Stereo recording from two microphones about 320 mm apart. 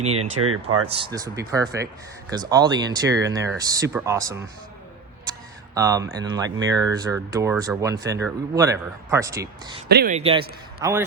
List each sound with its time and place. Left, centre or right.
0.1 s speech: right
0.9 s speech: centre
5.7 s speech: centre
9.9 s a man's voice: right; by 11.0 s centre